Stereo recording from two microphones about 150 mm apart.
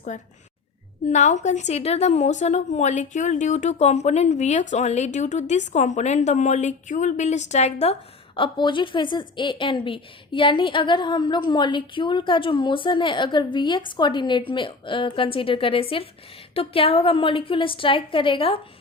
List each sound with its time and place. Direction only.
0.1 s a woman's voice: 55° left (ahead or behind)
8.4 s a woman's voice: 30° left (ahead or behind)